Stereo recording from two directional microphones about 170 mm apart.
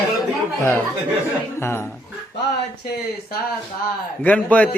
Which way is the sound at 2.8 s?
65° left (ahead or behind).